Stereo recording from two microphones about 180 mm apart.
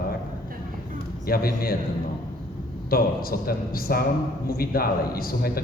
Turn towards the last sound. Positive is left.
turn(degrees=55)  # may be behind; listen again after turning